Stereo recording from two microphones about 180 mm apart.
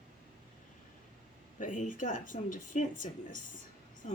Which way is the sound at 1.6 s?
45° left (ahead or behind).